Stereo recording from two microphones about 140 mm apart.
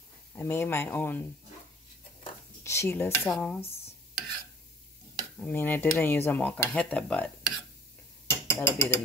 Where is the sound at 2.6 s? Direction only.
15° left (ahead or behind).